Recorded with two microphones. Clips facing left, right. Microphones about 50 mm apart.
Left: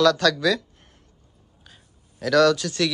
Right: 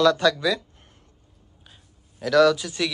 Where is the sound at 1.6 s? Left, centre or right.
Centre.